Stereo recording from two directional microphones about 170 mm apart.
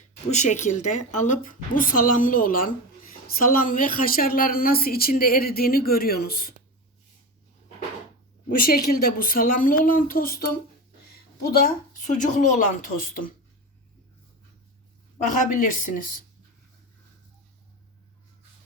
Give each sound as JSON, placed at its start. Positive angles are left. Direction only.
{"t": 0.3, "sound": "a woman's voice", "side_deg": 45}
{"t": 8.4, "sound": "a woman's voice", "side_deg": 60}
{"t": 12.0, "sound": "speech", "side_deg": 50}
{"t": 15.2, "sound": "speech", "side_deg": 50}